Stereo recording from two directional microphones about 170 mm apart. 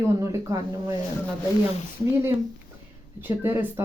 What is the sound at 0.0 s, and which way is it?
Speech, 20° right (ahead or behind).